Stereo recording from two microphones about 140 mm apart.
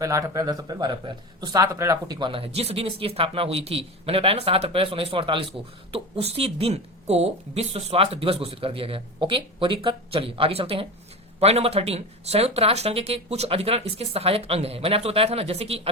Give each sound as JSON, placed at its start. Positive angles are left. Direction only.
{"t": 0.0, "sound": "a man's voice", "side_deg": -25}
{"t": 2.1, "sound": "a woman's voice", "side_deg": -35}